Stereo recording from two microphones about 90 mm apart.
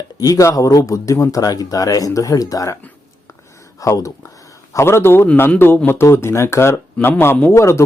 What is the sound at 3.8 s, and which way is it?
Speech, 35° left (ahead or behind).